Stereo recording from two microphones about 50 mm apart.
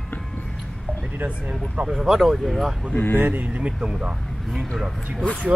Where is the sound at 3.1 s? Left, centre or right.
Right.